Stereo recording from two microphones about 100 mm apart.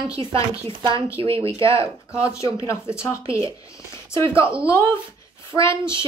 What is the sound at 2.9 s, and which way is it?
A woman's voice, 30° left (ahead or behind).